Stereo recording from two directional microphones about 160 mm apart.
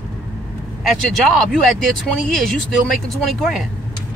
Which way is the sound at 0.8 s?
Centre (ahead or behind).